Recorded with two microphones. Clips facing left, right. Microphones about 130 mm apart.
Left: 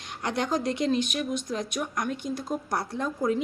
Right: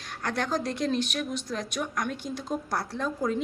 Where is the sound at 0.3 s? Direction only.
15° left (ahead or behind).